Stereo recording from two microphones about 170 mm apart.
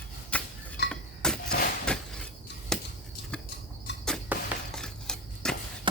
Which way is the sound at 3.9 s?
90° left.